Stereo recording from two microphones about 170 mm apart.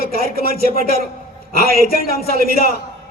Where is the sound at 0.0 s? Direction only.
65° right (ahead or behind).